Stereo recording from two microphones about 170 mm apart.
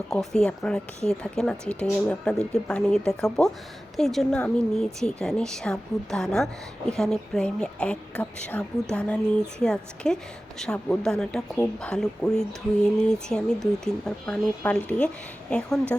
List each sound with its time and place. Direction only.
0.1 s a woman's voice: 5° left (ahead or behind)